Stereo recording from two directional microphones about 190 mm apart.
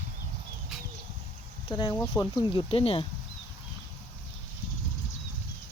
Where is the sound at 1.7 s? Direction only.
25° left (ahead or behind).